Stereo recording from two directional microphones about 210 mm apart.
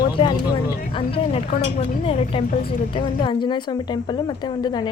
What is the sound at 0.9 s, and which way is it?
A woman's voice, 25° left (ahead or behind).